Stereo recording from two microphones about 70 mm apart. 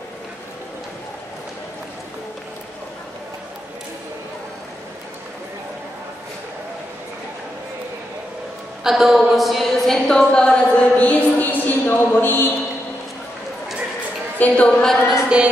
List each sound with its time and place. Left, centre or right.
8.8 s a woman's voice: centre; by 12.4 s left
14.4 s a woman's voice: centre
15.2 s music: centre